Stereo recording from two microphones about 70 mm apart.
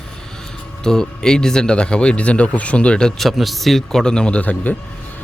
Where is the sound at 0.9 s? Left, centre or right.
Centre.